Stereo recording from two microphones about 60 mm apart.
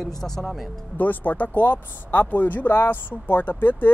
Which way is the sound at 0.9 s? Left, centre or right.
Left.